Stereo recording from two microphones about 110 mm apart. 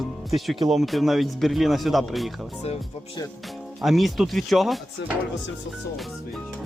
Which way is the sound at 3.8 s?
Centre (ahead or behind).